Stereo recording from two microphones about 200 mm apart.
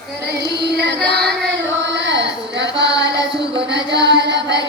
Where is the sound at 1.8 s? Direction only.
60° right (ahead or behind).